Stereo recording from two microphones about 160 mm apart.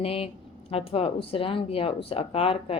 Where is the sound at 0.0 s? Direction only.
35° left (ahead or behind).